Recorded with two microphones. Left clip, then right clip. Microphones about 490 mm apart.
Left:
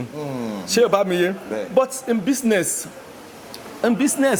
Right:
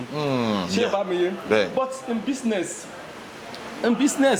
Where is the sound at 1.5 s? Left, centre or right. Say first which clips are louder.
Right 7 dB; right.